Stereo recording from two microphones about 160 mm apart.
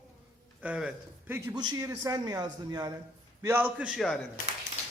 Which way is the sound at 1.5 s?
25° right (ahead or behind).